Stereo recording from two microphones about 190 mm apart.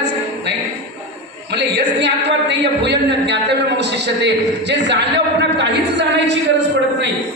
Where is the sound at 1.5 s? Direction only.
65° right (ahead or behind).